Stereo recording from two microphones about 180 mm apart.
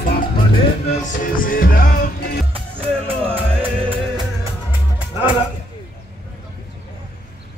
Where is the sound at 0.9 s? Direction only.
50° left (ahead or behind).